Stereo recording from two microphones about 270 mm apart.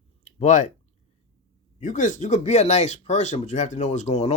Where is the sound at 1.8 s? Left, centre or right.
Left.